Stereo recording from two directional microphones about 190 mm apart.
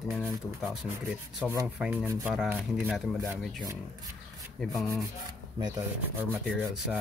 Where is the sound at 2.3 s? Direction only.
5° right (ahead or behind).